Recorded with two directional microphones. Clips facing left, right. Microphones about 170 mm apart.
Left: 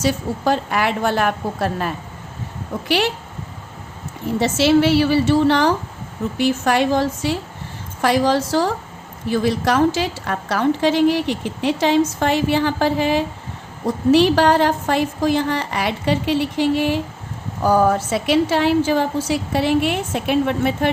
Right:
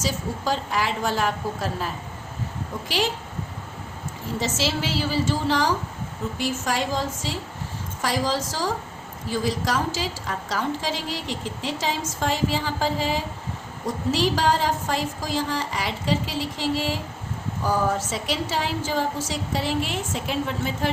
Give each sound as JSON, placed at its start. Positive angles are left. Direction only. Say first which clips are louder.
{"t": 0.0, "sound": "a woman's voice", "louder": "left 7 dB", "side_deg": 60}
{"t": 4.4, "sound": "a woman's voice", "louder": "left 11 dB", "side_deg": 60}